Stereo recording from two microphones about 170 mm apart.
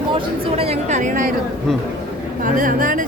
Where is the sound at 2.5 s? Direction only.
50° right (ahead or behind).